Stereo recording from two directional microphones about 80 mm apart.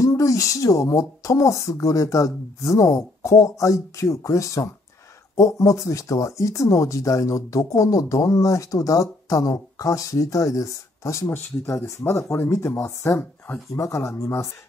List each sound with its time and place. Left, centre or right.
0.0 s speech: left
11.2 s speech: left